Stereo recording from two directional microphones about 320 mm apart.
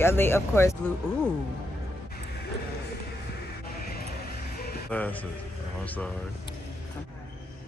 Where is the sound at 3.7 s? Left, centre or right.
Left.